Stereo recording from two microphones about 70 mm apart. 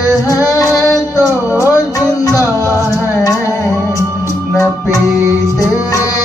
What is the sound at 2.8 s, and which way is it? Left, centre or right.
Music, left.